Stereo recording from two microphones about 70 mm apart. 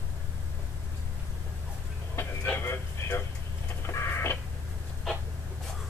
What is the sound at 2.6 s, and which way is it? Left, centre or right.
Vehicle, left.